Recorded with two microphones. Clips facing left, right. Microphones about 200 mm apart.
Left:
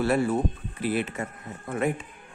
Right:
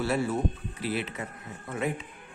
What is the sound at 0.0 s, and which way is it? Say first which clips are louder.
Speech: left 4 dB; 55° left (ahead or behind).